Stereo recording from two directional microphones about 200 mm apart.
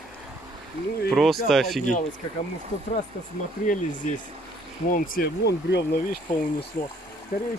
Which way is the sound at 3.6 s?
40° left (ahead or behind).